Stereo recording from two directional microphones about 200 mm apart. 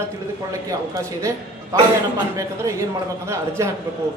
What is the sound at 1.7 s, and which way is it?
A woman's voice, 15° right (ahead or behind).